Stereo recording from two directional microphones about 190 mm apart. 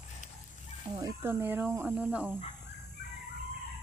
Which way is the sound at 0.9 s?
15° right (ahead or behind).